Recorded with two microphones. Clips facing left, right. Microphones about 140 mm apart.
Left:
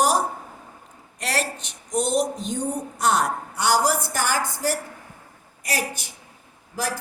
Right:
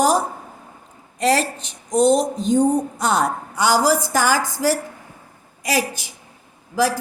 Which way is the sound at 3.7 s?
90° right.